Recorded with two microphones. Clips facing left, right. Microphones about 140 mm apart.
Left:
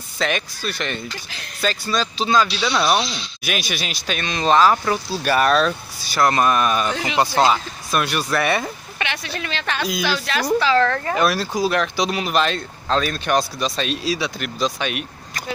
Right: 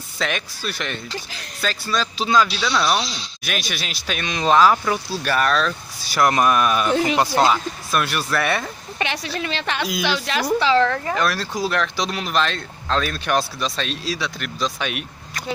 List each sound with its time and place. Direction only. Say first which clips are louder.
0.2 s speech: left 2 dB; 5° right (ahead or behind)
2.6 s speech: left 2 dB; 5° left (ahead or behind)
5.2 s speech: left 3 dB; 10° left (ahead or behind)
5.5 s speech: left 3 dB; 30° left (ahead or behind)
6.1 s speech: even; 10° right (ahead or behind)
9.0 s a woman's voice: right 2 dB; 35° right (ahead or behind)
9.8 s speech: left 1 dB; 5° right (ahead or behind)
10.0 s a woman's voice: even; 20° right (ahead or behind)
11.1 s speech: left 3 dB; 10° left (ahead or behind)